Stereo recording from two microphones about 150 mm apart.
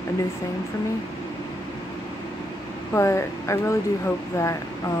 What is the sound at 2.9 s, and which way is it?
Speech, 20° left (ahead or behind).